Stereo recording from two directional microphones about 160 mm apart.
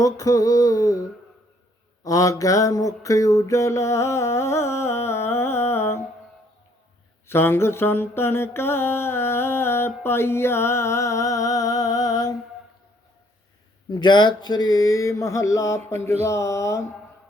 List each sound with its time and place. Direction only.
0.0 s mantra: 20° left (ahead or behind)
2.0 s mantra: 20° left (ahead or behind)
7.3 s mantra: 15° left (ahead or behind)
13.9 s mantra: 30° left (ahead or behind)